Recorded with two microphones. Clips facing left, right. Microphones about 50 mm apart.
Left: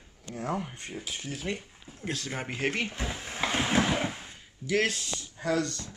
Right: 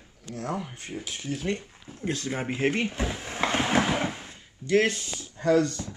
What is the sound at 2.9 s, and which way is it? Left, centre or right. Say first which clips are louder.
Drawer open or close: right 4 dB; centre.